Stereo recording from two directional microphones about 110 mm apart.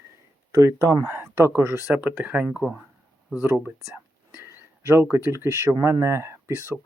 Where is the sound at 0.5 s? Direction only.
30° right (ahead or behind); by 2.8 s 10° right (ahead or behind).